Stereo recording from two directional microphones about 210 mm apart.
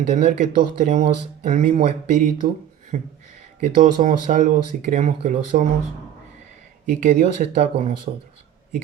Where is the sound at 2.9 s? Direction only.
35° right (ahead or behind).